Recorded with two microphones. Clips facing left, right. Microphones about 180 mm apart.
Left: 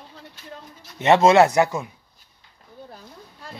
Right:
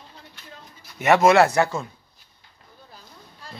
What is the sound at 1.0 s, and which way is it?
Speech, 25° left (ahead or behind).